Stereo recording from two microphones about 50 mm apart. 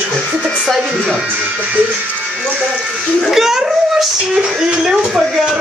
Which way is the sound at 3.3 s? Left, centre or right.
Centre.